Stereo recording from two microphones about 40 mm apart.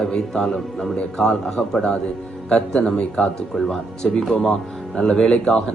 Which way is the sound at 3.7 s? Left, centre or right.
Centre.